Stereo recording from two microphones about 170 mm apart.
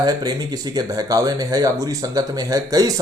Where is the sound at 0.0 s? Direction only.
25° right (ahead or behind).